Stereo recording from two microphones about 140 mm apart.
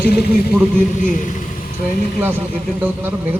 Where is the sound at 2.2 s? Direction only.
15° right (ahead or behind).